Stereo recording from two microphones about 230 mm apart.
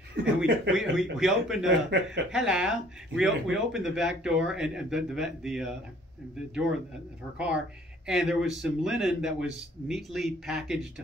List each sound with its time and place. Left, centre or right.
0.4 s speech: centre
1.9 s speech: right
2.3 s speech: centre
7.3 s speech: centre